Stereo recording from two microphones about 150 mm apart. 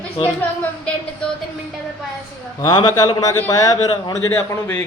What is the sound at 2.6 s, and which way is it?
A man's voice, 25° left (ahead or behind).